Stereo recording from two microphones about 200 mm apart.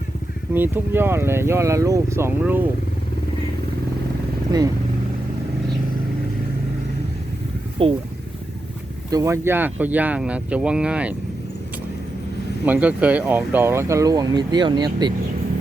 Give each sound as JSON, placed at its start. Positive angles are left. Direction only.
{"t": 0.5, "sound": "speech", "side_deg": -10}
{"t": 4.5, "sound": "speech", "side_deg": -20}
{"t": 7.8, "sound": "speech", "side_deg": -25}
{"t": 9.0, "sound": "speech", "side_deg": -15}
{"t": 12.6, "sound": "speech", "side_deg": -5}